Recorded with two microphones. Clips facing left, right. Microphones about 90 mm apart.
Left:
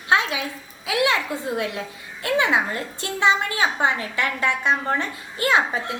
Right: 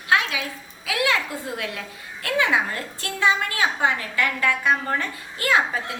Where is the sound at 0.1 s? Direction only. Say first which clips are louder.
Left 1 dB; 25° left (ahead or behind).